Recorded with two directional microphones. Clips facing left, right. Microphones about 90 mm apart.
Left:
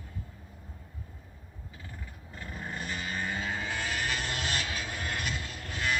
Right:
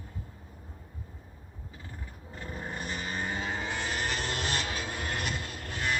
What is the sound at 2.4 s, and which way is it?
Vehicle, 20° right (ahead or behind).